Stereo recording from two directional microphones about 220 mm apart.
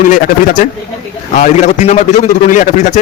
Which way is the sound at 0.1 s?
35° left (ahead or behind).